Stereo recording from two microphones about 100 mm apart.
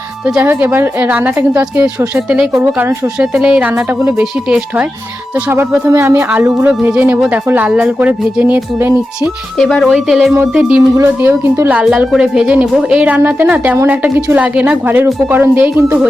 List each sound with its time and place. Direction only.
0.4 s a woman's voice: 20° right (ahead or behind)
3.2 s a woman's voice: 10° right (ahead or behind)
9.6 s a woman's voice: 5° left (ahead or behind); by 10.8 s 10° right (ahead or behind)
10.9 s a woman's voice: 25° right (ahead or behind)